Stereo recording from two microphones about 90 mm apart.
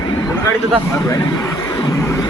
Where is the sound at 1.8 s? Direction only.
35° left (ahead or behind).